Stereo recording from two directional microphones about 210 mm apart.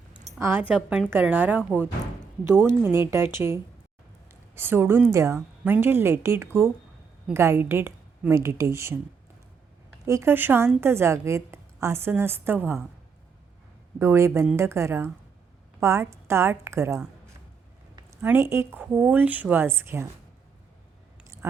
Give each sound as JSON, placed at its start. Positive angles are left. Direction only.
{"t": 0.3, "sound": "a woman's voice", "side_deg": -10}
{"t": 0.7, "sound": "a woman's voice", "side_deg": 0}
{"t": 4.3, "sound": "a sound", "side_deg": -10}
{"t": 5.1, "sound": "a woman's voice", "side_deg": -15}
{"t": 10.1, "sound": "a woman's voice", "side_deg": -10}
{"t": 14.0, "sound": "a woman's voice", "side_deg": -10}